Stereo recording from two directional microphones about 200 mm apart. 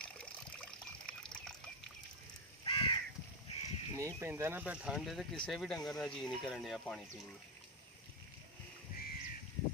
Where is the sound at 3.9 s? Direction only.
15° right (ahead or behind); by 7.0 s centre (ahead or behind).